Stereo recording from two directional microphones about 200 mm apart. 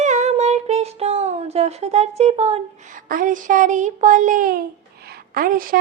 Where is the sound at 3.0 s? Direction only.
45° right (ahead or behind).